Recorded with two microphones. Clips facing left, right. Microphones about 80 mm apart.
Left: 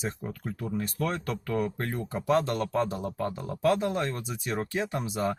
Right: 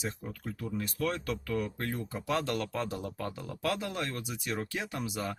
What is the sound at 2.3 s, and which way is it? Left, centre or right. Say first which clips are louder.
Speech: left 6 dB; left.